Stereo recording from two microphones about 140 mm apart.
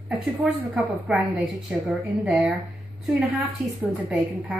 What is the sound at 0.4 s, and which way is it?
A woman's voice, centre (ahead or behind).